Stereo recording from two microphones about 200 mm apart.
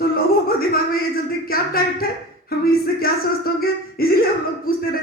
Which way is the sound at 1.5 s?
50° left (ahead or behind).